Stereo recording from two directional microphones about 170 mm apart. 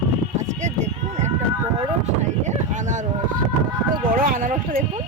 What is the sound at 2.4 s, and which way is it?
Speech, 45° right (ahead or behind).